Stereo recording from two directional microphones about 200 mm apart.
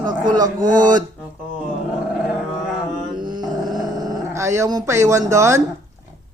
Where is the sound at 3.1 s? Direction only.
20° right (ahead or behind).